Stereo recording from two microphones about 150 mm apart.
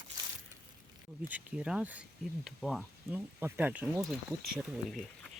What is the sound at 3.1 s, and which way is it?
Speech, 15° right (ahead or behind).